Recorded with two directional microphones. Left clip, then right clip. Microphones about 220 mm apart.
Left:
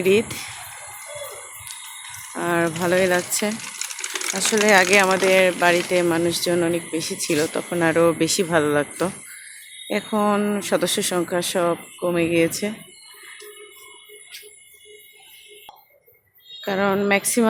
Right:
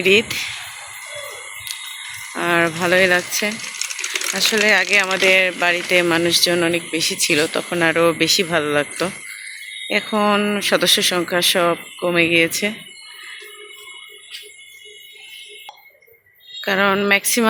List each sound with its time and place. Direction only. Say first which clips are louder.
0.0 s speech: right 4 dB; 10° left (ahead or behind)
2.3 s speech: right 4 dB; centre (ahead or behind)
3.8 s sewing machine: right 5 dB; 60° left (ahead or behind)
4.4 s speech: right 1 dB; 10° left (ahead or behind)
8.2 s speech: right 2 dB; 15° left (ahead or behind)
16.6 s speech: right 4 dB; 5° left (ahead or behind)